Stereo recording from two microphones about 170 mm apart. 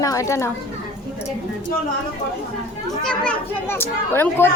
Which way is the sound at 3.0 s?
5° left (ahead or behind).